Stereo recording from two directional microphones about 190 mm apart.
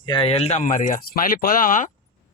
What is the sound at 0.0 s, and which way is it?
Speech, 25° left (ahead or behind).